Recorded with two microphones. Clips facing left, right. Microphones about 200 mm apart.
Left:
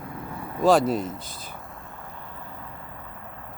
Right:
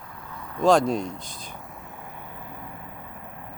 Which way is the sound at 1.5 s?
15° right (ahead or behind).